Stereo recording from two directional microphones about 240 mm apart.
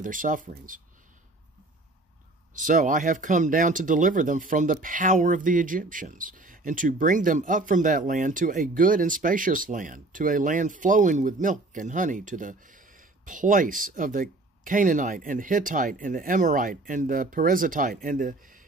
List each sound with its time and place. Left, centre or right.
0.0 s speech: right
2.5 s speech: right